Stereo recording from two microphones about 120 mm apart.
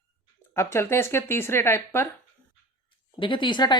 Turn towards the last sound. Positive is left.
turn(degrees=40)  # may be behind; listen again after turning